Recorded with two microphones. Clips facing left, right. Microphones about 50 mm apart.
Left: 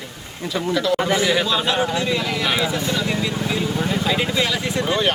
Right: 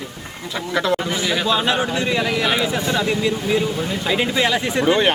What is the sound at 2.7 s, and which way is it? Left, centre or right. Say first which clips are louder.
Speech: right 2 dB; right.